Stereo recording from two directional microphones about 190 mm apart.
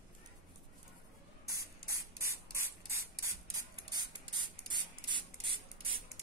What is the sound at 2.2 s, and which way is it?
Spray, 15° right (ahead or behind).